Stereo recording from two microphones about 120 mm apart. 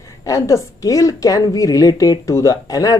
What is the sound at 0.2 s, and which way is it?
A woman's voice, 25° left (ahead or behind).